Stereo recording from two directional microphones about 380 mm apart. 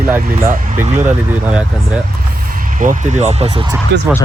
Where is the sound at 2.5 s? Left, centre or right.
Right.